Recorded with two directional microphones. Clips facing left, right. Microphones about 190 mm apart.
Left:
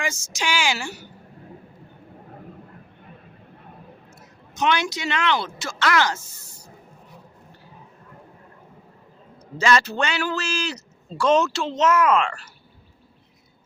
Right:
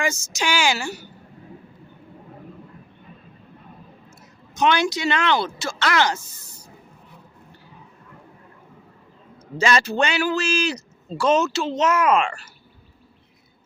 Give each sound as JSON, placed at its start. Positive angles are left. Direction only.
{"t": 0.0, "sound": "speech", "side_deg": -45}
{"t": 4.5, "sound": "speech", "side_deg": -35}
{"t": 9.6, "sound": "a man's voice", "side_deg": -15}